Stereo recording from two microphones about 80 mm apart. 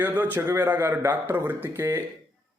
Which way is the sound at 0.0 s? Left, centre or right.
Right.